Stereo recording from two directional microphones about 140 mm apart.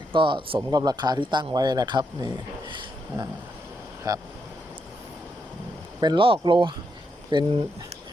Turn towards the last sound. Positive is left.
turn(degrees=-30)  # may be behind; listen again after turning